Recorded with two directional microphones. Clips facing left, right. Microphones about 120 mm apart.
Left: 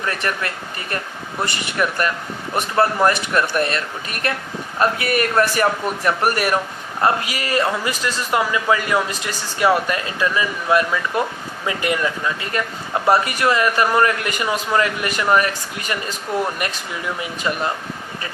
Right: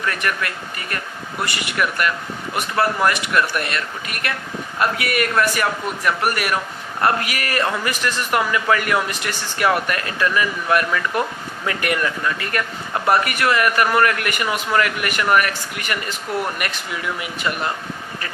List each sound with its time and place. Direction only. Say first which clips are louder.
0.0 s a man's voice: even; 30° left (ahead or behind)
7.0 s speech: left 1 dB; 20° left (ahead or behind)